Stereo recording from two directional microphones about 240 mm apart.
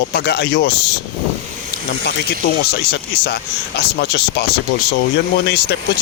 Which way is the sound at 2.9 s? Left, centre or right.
Left.